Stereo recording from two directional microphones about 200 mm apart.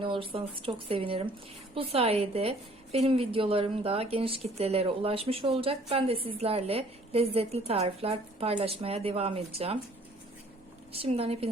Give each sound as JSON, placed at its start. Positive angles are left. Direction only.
{"t": 0.0, "sound": "a woman's voice", "side_deg": -25}
{"t": 10.9, "sound": "a woman's voice", "side_deg": -30}